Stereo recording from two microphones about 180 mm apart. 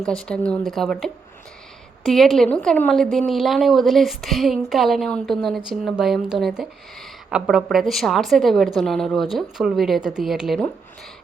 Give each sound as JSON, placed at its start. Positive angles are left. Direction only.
{"t": 0.0, "sound": "speech", "side_deg": 5}